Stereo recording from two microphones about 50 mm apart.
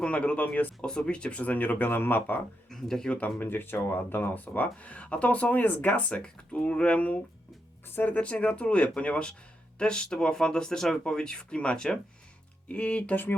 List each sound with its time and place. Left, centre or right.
0.0 s speech: left
0.9 s speech: centre; by 2.4 s left
2.6 s speech: centre
3.1 s speech: left
6.1 s speech: left
7.9 s speech: left